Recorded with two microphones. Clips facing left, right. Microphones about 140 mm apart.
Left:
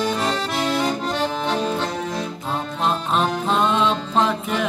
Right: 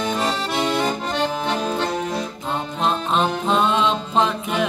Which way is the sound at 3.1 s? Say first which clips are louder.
Right 1 dB; centre (ahead or behind).